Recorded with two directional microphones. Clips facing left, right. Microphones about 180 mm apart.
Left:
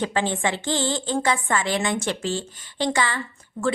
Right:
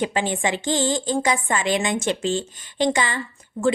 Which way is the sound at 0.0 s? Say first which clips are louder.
Right 1 dB; 15° right (ahead or behind).